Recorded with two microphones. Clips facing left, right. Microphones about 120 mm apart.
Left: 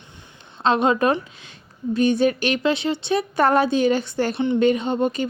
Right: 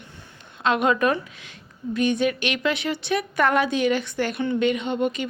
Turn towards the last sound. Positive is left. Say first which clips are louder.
# left 3 dB
turn(degrees=35)  # may be behind; listen again after turning